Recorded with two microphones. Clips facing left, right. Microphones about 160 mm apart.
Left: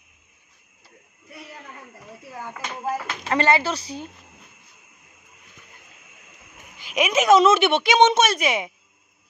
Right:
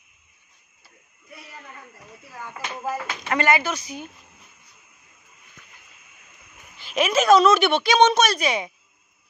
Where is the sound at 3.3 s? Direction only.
30° left (ahead or behind).